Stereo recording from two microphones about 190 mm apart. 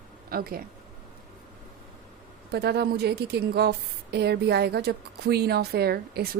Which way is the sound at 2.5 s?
60° right (ahead or behind).